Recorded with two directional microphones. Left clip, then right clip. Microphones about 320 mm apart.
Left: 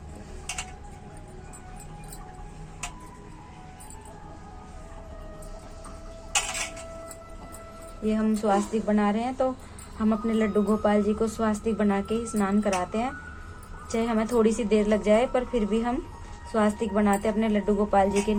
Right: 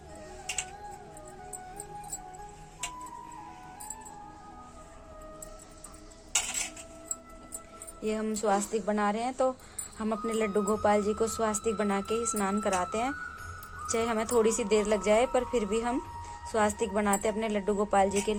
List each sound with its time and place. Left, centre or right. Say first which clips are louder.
8.0 s a woman's voice: left 4 dB; right